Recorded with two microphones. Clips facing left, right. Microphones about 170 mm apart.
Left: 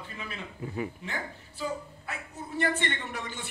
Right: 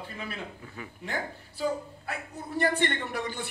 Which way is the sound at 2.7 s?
50° right (ahead or behind).